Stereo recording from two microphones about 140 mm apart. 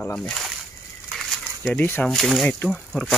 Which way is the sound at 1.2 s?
5° left (ahead or behind).